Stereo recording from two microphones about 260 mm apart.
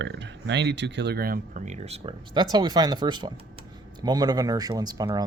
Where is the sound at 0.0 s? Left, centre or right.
Right.